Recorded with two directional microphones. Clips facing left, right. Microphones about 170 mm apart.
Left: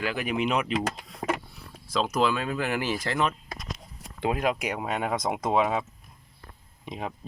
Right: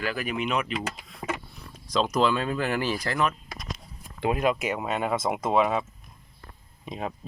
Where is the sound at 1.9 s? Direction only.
5° left (ahead or behind).